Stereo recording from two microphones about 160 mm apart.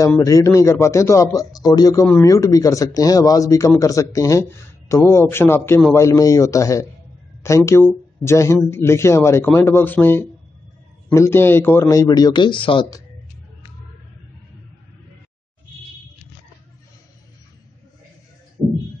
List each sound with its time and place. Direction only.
0.0 s speech: 20° left (ahead or behind)